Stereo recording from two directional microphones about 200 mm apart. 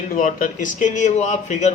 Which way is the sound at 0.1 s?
45° left (ahead or behind).